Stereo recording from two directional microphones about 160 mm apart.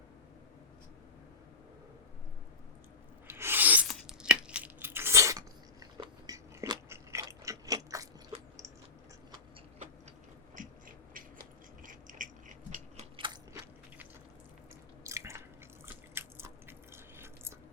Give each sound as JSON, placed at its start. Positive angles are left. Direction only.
{"t": 3.2, "sound": "rub", "side_deg": -15}
{"t": 3.8, "sound": "a sound", "side_deg": -5}
{"t": 6.0, "sound": "biting", "side_deg": -20}
{"t": 10.5, "sound": "a sound", "side_deg": -55}
{"t": 13.1, "sound": "biting", "side_deg": -30}
{"t": 15.0, "sound": "drip", "side_deg": -20}
{"t": 16.1, "sound": "biting", "side_deg": -15}